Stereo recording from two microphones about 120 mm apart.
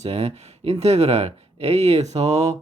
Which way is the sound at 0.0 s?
60° right (ahead or behind).